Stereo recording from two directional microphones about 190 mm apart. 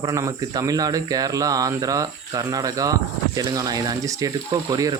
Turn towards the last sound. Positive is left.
turn(degrees=-20)  # may be behind; listen again after turning